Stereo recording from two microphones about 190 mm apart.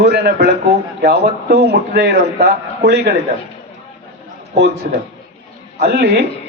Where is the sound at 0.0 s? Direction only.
60° right (ahead or behind).